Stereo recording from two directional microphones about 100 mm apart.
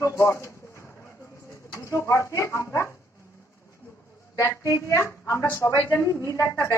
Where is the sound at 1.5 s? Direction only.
30° left (ahead or behind).